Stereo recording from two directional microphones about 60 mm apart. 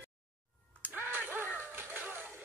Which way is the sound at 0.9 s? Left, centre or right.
Right.